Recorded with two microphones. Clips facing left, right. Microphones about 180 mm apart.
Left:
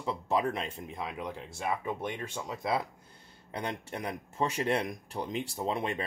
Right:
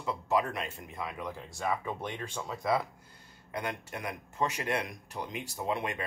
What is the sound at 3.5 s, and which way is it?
Speech, 30° left (ahead or behind).